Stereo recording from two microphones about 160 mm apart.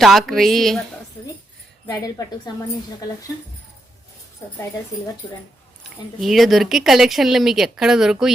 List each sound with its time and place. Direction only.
0.0 s speech: centre (ahead or behind)
1.9 s speech: 20° left (ahead or behind)
6.1 s speech: centre (ahead or behind)